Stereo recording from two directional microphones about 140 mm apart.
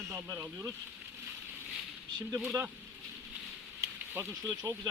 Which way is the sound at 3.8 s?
25° right (ahead or behind).